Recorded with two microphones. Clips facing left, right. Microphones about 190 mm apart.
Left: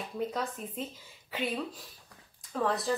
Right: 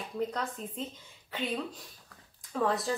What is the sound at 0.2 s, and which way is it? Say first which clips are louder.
A woman's voice: even; 5° left (ahead or behind).